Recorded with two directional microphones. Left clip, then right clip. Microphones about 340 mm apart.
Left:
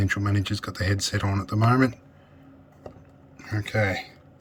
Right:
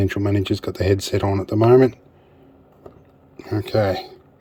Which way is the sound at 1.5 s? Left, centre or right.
Right.